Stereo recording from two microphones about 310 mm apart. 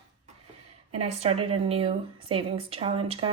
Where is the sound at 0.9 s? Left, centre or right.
Centre.